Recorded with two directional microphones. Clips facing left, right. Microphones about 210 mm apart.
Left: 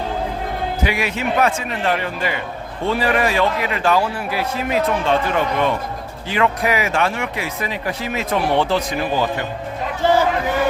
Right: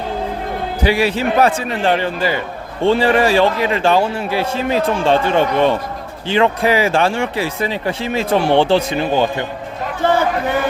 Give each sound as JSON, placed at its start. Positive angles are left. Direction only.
{"t": 0.8, "sound": "speech", "side_deg": -30}